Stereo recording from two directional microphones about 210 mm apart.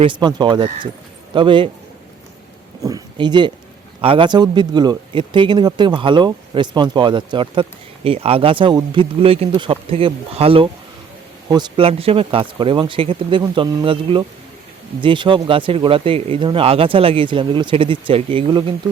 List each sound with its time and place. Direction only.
0.0 s speech: 20° right (ahead or behind)
2.8 s speech: 20° right (ahead or behind)